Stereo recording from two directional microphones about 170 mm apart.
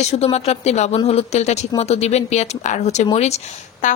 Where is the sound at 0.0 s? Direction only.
40° left (ahead or behind).